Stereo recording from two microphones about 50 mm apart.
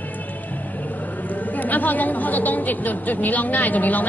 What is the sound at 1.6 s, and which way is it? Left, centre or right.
A woman's voice, left.